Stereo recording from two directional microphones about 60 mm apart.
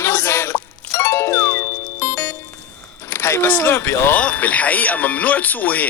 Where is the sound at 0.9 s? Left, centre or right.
Left.